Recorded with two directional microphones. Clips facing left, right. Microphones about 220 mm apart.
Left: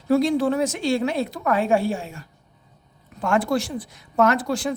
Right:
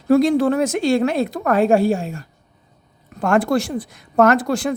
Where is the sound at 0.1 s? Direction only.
50° right (ahead or behind).